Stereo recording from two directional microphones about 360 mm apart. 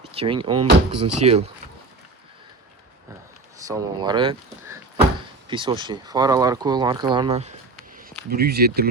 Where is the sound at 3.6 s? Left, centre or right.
Centre.